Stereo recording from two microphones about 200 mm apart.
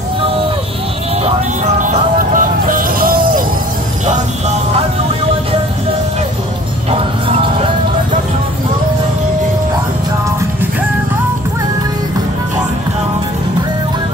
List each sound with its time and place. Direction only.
1.8 s music: 40° right (ahead or behind)